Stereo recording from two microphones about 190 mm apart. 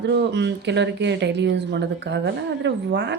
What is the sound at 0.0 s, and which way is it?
A woman's voice, 65° right (ahead or behind).